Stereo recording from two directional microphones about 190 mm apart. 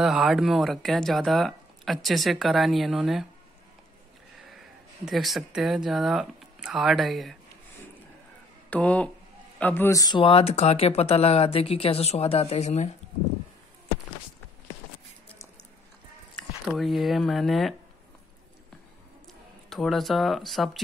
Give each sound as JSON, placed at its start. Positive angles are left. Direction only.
{"t": 0.0, "sound": "speech", "side_deg": 0}
{"t": 5.0, "sound": "speech", "side_deg": 0}
{"t": 8.6, "sound": "speech", "side_deg": 5}
{"t": 16.6, "sound": "speech", "side_deg": 0}
{"t": 19.7, "sound": "speech", "side_deg": 0}